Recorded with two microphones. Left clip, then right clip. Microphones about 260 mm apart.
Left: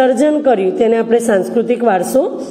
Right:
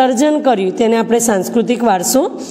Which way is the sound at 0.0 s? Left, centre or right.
Right.